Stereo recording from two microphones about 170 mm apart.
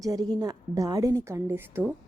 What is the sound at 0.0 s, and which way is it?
A woman's voice, 20° right (ahead or behind).